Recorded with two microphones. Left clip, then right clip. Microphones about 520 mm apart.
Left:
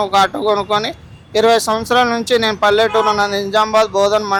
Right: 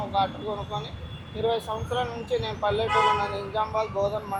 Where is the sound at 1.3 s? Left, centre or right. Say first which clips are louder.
Left 15 dB; left.